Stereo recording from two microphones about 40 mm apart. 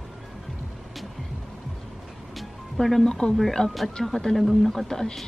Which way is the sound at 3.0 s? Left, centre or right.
Centre.